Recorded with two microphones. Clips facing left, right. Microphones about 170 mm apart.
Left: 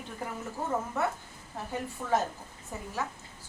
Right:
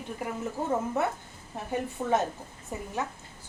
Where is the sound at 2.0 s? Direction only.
25° right (ahead or behind).